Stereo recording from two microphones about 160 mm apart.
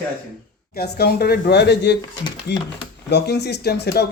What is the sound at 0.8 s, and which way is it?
Speech, 80° left.